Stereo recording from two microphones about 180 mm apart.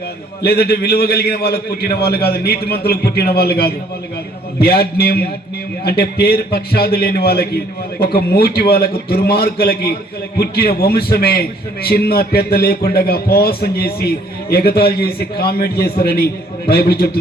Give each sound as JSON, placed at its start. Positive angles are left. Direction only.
{"t": 0.4, "sound": "a man's voice", "side_deg": 60}